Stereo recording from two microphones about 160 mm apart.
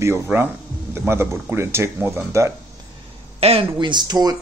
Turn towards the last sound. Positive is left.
turn(degrees=-25)  # may be behind; listen again after turning